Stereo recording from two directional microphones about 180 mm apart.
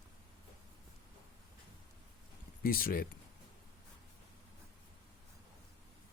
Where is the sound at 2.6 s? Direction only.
55° left (ahead or behind).